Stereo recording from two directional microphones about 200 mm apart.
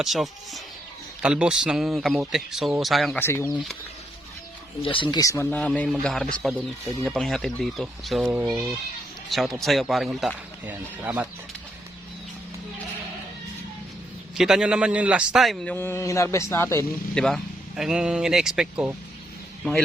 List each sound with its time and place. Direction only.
0.0 s speech: centre (ahead or behind)
3.2 s speech: 10° left (ahead or behind)
4.8 s speech: 25° left (ahead or behind); by 11.3 s 10° right (ahead or behind)
14.3 s speech: centre (ahead or behind)
17.2 s speech: centre (ahead or behind)